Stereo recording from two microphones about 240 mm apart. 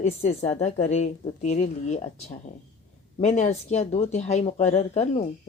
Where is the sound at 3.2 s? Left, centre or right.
Left.